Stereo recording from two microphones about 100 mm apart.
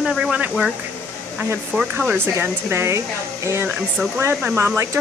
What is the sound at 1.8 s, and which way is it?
Speech, 5° right (ahead or behind).